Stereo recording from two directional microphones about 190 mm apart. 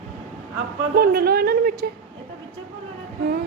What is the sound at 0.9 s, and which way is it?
Speech, 50° right (ahead or behind).